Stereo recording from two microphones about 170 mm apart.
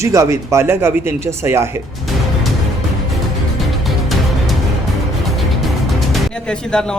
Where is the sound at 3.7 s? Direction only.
Centre (ahead or behind).